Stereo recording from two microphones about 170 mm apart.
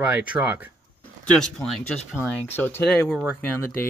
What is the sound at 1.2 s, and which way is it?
Speech, 5° left (ahead or behind).